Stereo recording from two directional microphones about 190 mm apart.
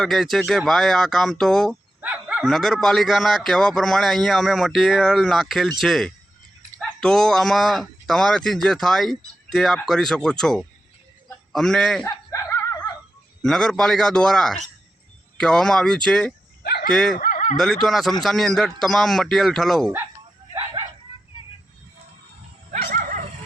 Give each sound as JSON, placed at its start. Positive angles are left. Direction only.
{"t": 0.0, "sound": "speech", "side_deg": 0}
{"t": 2.0, "sound": "speech", "side_deg": -10}
{"t": 12.1, "sound": "snicker", "side_deg": 15}
{"t": 13.4, "sound": "speech", "side_deg": 5}
{"t": 16.6, "sound": "dog", "side_deg": 55}
{"t": 16.9, "sound": "speech", "side_deg": 0}
{"t": 17.2, "sound": "a sound", "side_deg": 45}
{"t": 17.6, "sound": "speech", "side_deg": 0}
{"t": 22.7, "sound": "dog", "side_deg": -40}